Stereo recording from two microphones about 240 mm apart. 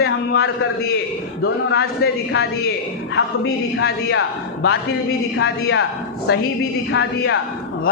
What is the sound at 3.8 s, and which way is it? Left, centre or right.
A man's voice, left.